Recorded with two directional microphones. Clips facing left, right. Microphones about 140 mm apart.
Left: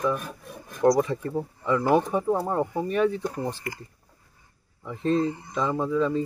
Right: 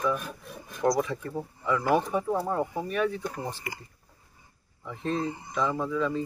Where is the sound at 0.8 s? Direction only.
35° left (ahead or behind).